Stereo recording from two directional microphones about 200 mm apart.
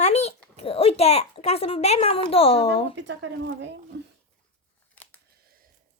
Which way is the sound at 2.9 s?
65° right (ahead or behind).